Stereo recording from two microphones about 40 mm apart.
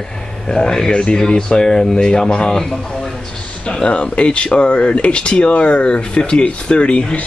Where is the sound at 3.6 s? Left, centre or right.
Left.